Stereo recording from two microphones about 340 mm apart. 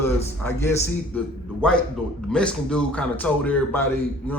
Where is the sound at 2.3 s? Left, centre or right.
Centre.